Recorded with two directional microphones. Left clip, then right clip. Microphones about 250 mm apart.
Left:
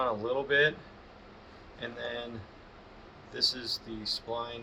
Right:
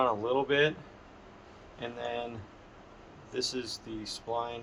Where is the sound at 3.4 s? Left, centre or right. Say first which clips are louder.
Left 4 dB; right.